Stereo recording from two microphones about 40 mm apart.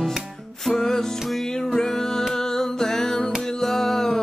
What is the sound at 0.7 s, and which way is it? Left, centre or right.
Music, centre.